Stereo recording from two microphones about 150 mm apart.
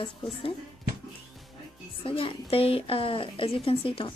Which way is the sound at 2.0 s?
35° left (ahead or behind).